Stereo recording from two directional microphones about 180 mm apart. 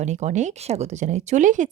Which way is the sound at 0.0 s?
40° right (ahead or behind).